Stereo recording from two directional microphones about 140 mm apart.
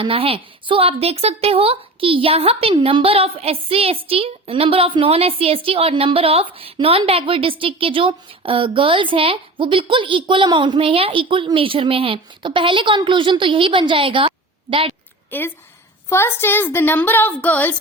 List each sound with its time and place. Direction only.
0.0 s speech: 45° right (ahead or behind)
15.3 s a woman's voice: 15° left (ahead or behind)